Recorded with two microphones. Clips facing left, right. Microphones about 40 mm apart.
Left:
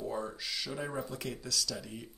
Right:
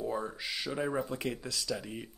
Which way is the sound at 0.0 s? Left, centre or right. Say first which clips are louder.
Right 2 dB; centre.